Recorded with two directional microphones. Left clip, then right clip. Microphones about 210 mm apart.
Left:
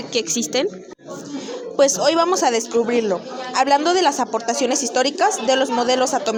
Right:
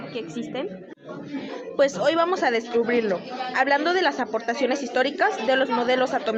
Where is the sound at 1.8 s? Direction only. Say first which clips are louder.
Left 4 dB; 20° left (ahead or behind).